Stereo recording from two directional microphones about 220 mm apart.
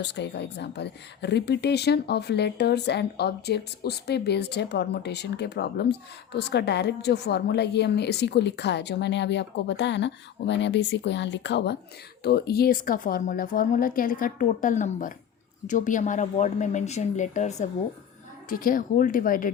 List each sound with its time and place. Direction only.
0.0 s a woman's voice: 50° left (ahead or behind)